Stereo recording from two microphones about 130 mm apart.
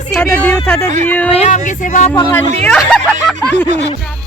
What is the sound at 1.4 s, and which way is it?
Speech, 70° left (ahead or behind).